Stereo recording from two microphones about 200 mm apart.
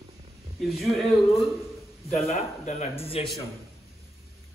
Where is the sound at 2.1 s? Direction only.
35° left (ahead or behind).